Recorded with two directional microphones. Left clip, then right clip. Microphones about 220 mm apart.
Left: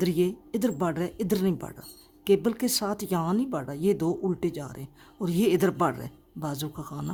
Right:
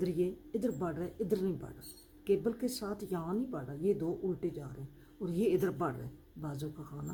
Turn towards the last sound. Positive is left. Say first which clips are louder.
# left 9 dB
turn(degrees=50)  # may be behind; listen again after turning